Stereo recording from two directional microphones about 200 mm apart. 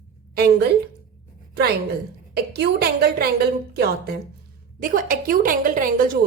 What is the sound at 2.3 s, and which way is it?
A woman's voice, 55° right (ahead or behind).